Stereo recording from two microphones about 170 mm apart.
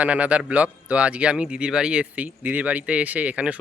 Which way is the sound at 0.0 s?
10° right (ahead or behind).